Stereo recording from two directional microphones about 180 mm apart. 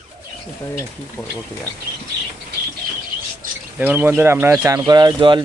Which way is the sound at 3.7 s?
10° right (ahead or behind).